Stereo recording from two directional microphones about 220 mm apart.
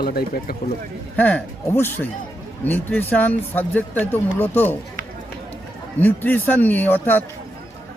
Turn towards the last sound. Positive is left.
turn(degrees=10)  # may be behind; listen again after turning